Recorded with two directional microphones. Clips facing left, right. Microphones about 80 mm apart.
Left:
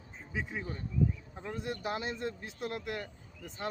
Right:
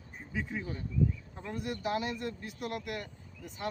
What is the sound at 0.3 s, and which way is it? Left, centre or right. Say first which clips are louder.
Speech: right 1 dB; centre.